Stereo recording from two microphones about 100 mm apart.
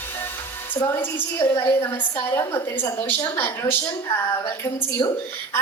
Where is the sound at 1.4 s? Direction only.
30° left (ahead or behind).